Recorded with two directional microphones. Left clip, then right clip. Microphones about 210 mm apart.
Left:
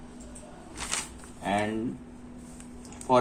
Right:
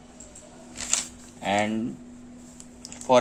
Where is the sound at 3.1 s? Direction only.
55° right (ahead or behind).